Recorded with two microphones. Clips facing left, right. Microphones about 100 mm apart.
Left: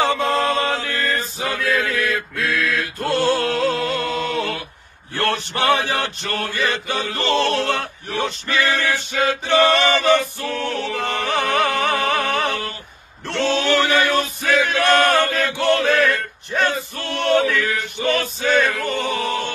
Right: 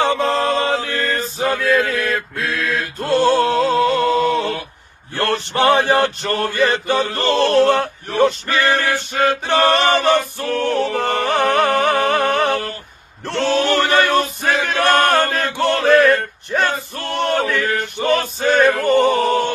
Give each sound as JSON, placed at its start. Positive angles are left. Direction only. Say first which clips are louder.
{"t": 0.0, "sound": "chant", "louder": "right 2 dB", "side_deg": -30}
{"t": 2.4, "sound": "a sound", "louder": "left 2 dB", "side_deg": -25}
{"t": 5.1, "sound": "male singing", "louder": "right 3 dB", "side_deg": -35}